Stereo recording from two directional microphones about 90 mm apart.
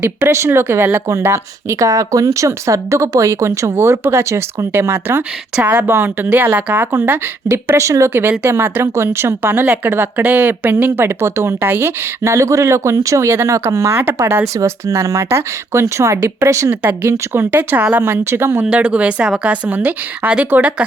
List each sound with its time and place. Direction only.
0.0 s speech: 25° right (ahead or behind)
5.5 s a woman's voice: 15° right (ahead or behind)
18.6 s a woman's voice: 10° right (ahead or behind)